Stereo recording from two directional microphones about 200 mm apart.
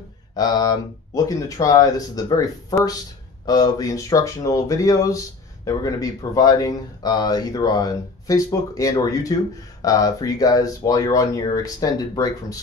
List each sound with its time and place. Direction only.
0.4 s speech: 20° left (ahead or behind)